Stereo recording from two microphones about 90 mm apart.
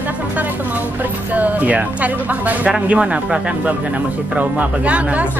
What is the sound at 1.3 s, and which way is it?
Speech, 15° right (ahead or behind).